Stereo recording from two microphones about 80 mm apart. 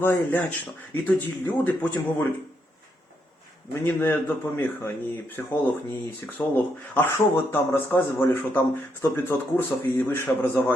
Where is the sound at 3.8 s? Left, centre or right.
Left.